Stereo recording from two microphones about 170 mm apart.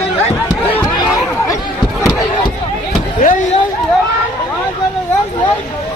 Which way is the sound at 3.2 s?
55° left (ahead or behind).